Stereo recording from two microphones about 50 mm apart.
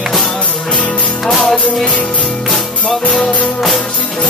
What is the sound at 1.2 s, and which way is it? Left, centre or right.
Music, centre.